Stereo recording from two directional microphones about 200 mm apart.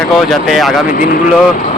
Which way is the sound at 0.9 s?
45° left (ahead or behind).